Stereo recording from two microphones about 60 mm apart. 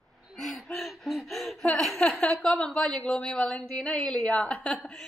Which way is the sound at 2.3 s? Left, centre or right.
Centre.